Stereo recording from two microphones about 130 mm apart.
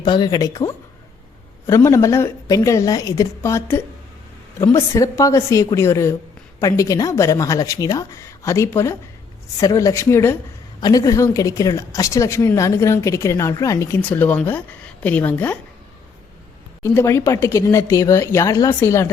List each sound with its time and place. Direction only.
0.0 s a woman's voice: 35° left (ahead or behind); by 10.3 s 20° left (ahead or behind)
10.8 s a woman's voice: 30° left (ahead or behind); by 15.5 s 15° left (ahead or behind)
16.8 s a woman's voice: 20° left (ahead or behind)